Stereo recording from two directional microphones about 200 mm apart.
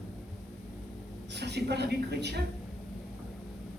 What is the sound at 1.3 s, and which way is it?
A woman's voice, 55° right (ahead or behind).